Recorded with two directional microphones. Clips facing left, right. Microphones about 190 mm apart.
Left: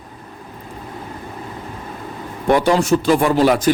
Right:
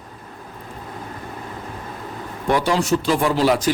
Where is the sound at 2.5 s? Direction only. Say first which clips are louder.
Left 4 dB; 50° left (ahead or behind).